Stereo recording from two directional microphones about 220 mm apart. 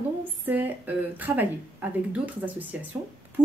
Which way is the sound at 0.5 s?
10° right (ahead or behind).